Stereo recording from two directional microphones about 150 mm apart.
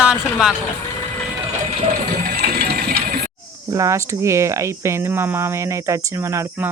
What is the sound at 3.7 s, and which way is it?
Speech, 20° right (ahead or behind).